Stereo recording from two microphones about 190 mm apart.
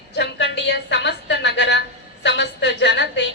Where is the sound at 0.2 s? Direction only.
70° left (ahead or behind).